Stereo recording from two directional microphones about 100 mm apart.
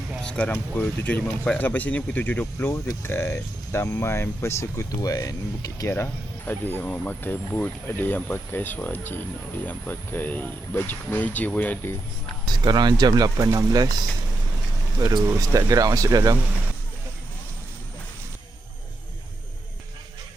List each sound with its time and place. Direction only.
0.2 s speech: 10° left (ahead or behind); by 4.9 s 25° left (ahead or behind)
4.9 s speech: 40° left (ahead or behind)
5.9 s speech: 25° left (ahead or behind)
12.5 s speech: 45° right (ahead or behind)